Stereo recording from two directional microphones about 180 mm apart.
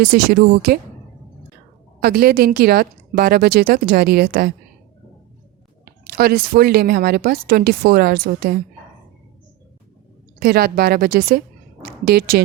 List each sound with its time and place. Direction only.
0.0 s speech: 55° right (ahead or behind)
2.0 s speech: 60° right (ahead or behind)
5.8 s speech: 55° right (ahead or behind)
10.4 s a woman's voice: 60° right (ahead or behind)